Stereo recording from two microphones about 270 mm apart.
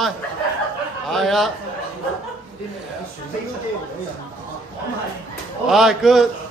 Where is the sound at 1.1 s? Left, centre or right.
Centre.